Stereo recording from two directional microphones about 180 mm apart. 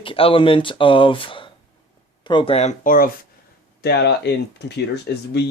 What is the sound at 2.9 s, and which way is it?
Speech, 50° left (ahead or behind).